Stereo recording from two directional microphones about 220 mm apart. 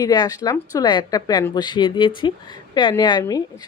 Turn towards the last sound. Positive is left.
turn(degrees=20)  # may be behind; listen again after turning